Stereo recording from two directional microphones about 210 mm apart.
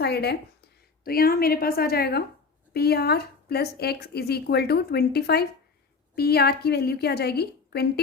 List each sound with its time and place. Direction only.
0.0 s a woman's voice: 50° left (ahead or behind)